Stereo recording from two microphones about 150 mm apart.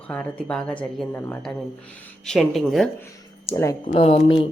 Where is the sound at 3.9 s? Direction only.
40° left (ahead or behind).